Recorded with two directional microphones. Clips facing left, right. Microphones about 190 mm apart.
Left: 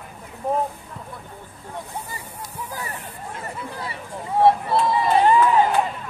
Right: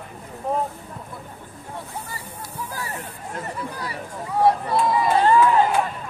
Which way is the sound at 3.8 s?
25° left (ahead or behind).